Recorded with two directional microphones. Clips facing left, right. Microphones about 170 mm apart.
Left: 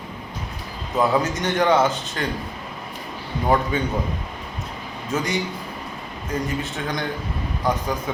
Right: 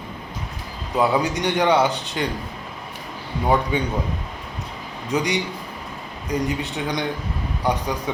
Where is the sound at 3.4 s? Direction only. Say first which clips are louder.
Even; 10° right (ahead or behind).